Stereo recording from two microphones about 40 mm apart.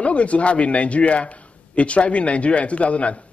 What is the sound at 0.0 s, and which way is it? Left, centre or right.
Speech, left.